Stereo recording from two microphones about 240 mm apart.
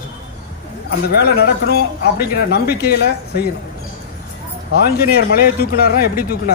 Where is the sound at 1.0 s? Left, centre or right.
Left.